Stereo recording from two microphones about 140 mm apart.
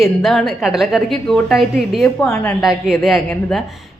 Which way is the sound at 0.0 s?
Centre (ahead or behind).